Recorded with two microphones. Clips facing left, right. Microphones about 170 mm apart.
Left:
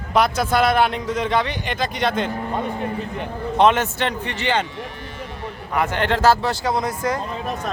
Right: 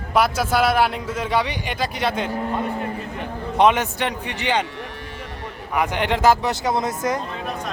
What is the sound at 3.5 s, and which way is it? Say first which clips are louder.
Speech: even; 10° right (ahead or behind).